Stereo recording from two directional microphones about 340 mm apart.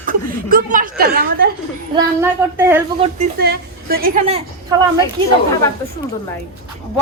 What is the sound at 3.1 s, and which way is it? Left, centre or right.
Speech, right.